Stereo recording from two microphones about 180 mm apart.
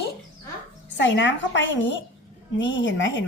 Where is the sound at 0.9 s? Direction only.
85° left.